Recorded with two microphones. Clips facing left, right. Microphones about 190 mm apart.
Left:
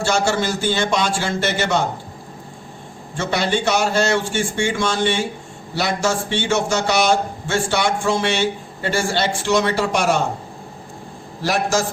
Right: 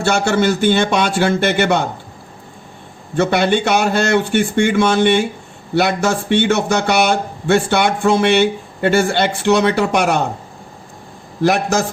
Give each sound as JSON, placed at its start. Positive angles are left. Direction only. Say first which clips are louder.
{"t": 0.0, "sound": "a man's voice", "louder": "right 4 dB", "side_deg": -60}
{"t": 3.2, "sound": "a man's voice", "louder": "right 6 dB", "side_deg": -60}
{"t": 11.4, "sound": "a man's voice", "louder": "right 4 dB", "side_deg": -60}